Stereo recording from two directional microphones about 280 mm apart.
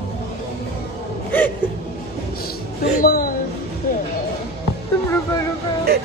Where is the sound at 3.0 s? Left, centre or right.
Left.